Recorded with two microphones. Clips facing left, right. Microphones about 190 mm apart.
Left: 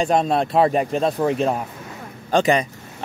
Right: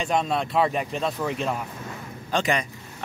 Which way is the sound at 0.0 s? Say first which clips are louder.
Left 6 dB; 40° left (ahead or behind).